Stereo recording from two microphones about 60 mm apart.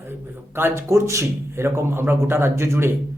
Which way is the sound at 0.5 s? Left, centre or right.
Right.